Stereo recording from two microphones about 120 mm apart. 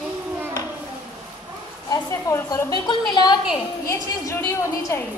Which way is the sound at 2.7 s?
40° left (ahead or behind).